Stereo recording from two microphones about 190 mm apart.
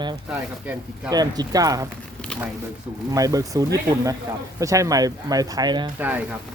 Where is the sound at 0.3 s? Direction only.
10° right (ahead or behind).